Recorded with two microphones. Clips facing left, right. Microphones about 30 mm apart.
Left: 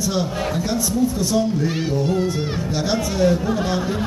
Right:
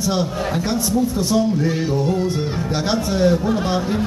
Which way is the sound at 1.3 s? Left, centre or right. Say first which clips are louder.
Right 2 dB; centre.